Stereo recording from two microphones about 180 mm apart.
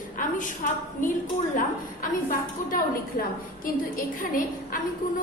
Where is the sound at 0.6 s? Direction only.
45° left (ahead or behind).